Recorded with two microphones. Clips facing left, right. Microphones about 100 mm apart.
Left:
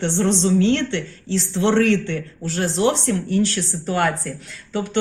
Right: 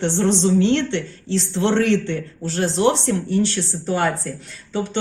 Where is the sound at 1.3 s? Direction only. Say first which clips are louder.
Left 1 dB; 35° right (ahead or behind).